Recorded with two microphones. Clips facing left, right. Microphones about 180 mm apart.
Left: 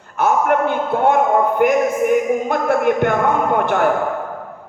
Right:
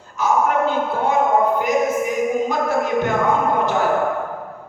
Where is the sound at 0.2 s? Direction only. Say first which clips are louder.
Left 2 dB; 60° left (ahead or behind).